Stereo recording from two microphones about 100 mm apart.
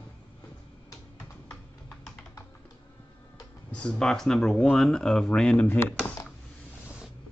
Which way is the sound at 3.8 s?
5° left (ahead or behind).